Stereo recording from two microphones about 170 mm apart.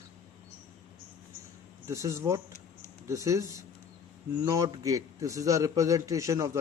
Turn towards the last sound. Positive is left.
turn(degrees=-15)  # may be behind; listen again after turning